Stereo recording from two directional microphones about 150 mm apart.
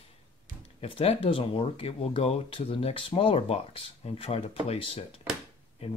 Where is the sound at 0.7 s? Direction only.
40° left (ahead or behind).